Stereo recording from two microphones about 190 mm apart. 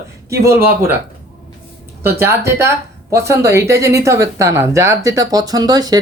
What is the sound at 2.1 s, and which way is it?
Speech, 15° right (ahead or behind).